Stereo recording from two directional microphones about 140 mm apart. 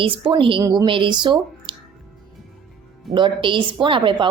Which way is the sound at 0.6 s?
25° right (ahead or behind).